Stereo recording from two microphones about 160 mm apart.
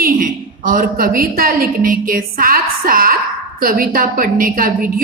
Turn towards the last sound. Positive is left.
turn(degrees=-60)  # may be behind; listen again after turning